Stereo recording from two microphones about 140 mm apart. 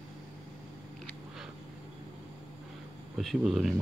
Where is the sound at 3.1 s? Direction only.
Centre (ahead or behind).